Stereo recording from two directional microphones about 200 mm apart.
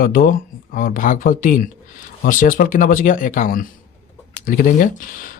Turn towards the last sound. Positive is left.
turn(degrees=45)  # may be behind; listen again after turning